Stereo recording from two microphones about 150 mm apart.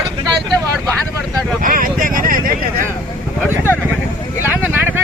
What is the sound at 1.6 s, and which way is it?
Vehicle, 70° right (ahead or behind).